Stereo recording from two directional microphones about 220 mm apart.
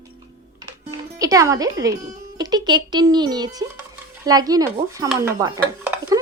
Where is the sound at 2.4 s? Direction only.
20° right (ahead or behind).